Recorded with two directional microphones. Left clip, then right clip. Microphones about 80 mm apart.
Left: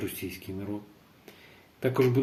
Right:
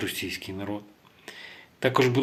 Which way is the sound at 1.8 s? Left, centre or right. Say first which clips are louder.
Right 3 dB; left.